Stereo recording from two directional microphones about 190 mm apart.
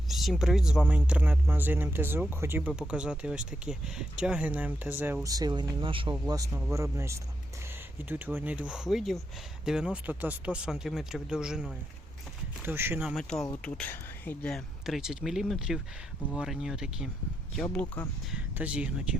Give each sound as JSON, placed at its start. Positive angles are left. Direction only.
{"t": 0.1, "sound": "speech", "side_deg": 0}
{"t": 13.1, "sound": "speech", "side_deg": 0}
{"t": 17.6, "sound": "speech", "side_deg": 10}
{"t": 18.3, "sound": "speech", "side_deg": -5}